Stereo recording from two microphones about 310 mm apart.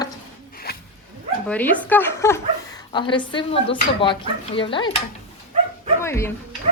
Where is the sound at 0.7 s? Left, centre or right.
Left.